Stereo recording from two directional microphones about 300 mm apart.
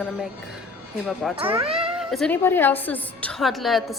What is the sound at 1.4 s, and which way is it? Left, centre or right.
Speech, centre.